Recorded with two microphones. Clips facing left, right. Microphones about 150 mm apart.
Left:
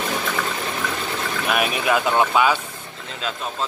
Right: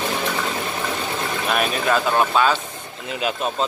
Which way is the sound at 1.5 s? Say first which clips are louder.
Even; 10° left (ahead or behind).